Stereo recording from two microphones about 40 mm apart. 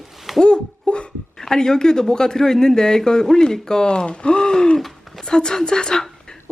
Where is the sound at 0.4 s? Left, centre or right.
Left.